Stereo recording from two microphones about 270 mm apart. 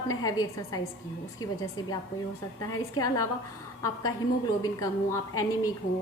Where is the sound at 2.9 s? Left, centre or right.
Centre.